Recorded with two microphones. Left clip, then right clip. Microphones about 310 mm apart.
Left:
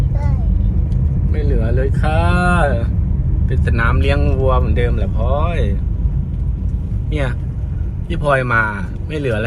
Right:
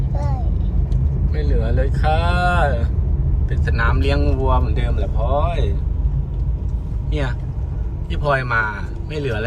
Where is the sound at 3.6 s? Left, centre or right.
Centre.